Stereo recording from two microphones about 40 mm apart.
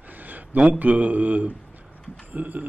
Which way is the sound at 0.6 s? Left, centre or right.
Right.